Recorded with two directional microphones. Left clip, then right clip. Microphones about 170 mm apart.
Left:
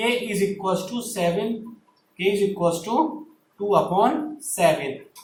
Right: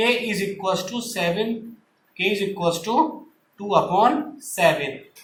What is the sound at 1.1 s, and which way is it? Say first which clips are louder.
Speech: even; 20° right (ahead or behind).